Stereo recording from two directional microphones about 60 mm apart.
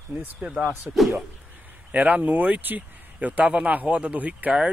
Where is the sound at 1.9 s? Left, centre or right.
Right.